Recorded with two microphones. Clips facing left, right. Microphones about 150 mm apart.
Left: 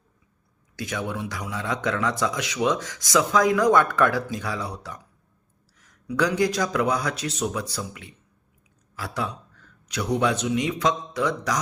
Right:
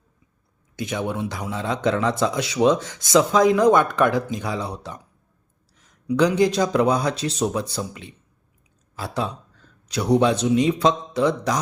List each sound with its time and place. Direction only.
0.8 s speech: 25° right (ahead or behind)